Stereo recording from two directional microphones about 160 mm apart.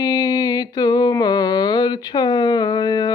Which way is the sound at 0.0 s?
25° left (ahead or behind).